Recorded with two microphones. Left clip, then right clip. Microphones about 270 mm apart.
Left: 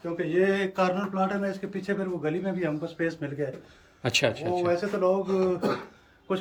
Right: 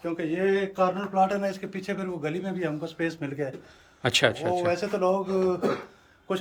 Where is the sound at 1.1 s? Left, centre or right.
Centre.